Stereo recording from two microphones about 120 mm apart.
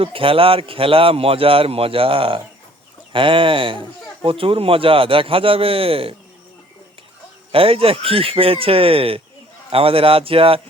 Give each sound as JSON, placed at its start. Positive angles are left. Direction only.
{"t": 0.0, "sound": "speech", "side_deg": -50}
{"t": 7.5, "sound": "speech", "side_deg": -50}